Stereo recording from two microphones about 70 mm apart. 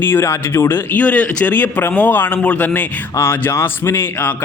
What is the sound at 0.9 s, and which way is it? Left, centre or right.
A man's voice, left.